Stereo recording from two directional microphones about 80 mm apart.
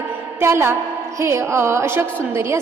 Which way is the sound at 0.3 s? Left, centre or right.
Right.